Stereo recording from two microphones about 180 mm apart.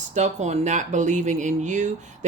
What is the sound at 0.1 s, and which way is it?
Speech, 40° right (ahead or behind).